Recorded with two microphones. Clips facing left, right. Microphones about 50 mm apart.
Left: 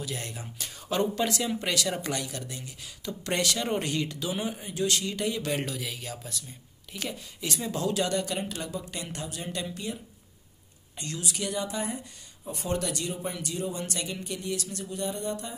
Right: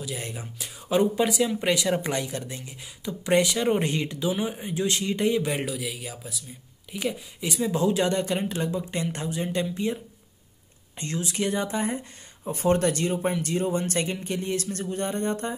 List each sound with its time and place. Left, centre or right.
0.2 s speech: centre
4.3 s speech: centre
4.6 s speech: right
7.7 s speech: centre
11.0 s speech: right